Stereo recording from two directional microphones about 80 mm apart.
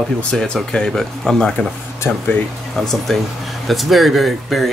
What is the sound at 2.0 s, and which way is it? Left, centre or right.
Speech, left.